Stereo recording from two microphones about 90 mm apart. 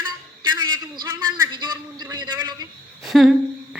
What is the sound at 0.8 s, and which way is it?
A man's voice, 60° right (ahead or behind).